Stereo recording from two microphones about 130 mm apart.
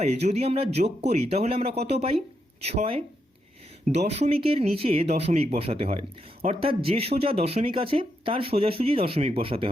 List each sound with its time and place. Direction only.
0.0 s speech: 55° right (ahead or behind)